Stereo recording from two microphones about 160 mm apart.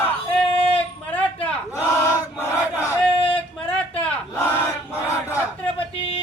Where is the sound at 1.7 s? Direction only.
15° left (ahead or behind).